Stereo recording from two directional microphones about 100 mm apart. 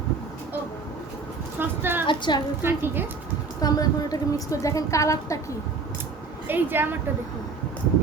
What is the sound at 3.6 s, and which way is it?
A woman's voice, 40° left (ahead or behind).